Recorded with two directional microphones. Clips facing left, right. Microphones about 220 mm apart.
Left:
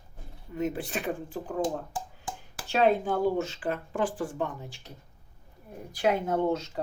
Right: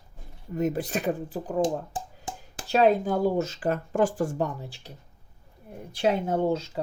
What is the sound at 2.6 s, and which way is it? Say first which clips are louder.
Speech: right 3 dB; 40° right (ahead or behind).